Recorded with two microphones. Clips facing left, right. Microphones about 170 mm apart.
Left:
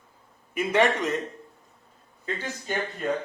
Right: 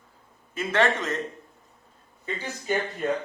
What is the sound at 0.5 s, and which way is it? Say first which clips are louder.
Speech: left 1 dB; 15° left (ahead or behind).